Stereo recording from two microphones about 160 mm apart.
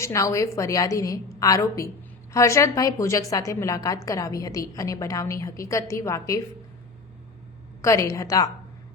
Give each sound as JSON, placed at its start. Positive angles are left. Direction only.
{"t": 0.0, "sound": "a woman's voice", "side_deg": 20}
{"t": 7.8, "sound": "a woman's voice", "side_deg": 20}